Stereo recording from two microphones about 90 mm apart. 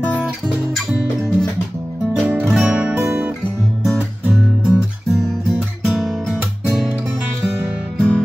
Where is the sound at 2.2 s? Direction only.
10° right (ahead or behind).